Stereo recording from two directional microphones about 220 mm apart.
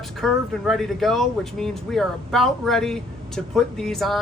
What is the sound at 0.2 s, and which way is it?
Speech, centre (ahead or behind).